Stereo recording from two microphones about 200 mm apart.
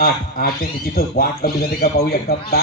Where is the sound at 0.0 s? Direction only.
50° left (ahead or behind).